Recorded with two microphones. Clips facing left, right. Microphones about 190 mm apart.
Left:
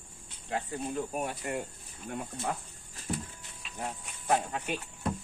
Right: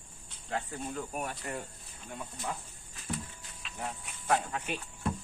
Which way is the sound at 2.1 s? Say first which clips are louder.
Left 4 dB; 55° left (ahead or behind).